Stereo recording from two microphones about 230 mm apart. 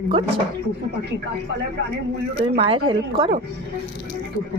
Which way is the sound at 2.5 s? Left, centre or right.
Right.